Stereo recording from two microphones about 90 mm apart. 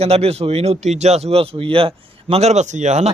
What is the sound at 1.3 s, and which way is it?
Speech, 90° right.